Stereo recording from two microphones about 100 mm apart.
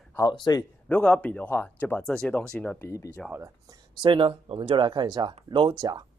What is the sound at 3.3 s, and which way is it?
Speech, 30° right (ahead or behind).